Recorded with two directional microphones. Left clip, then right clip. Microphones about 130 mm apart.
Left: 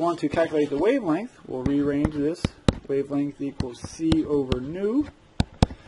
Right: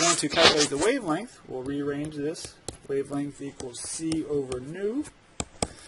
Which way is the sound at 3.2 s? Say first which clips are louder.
Left 5 dB; 30° left (ahead or behind).